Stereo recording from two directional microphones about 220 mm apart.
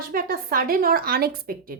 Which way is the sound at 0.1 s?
40° right (ahead or behind).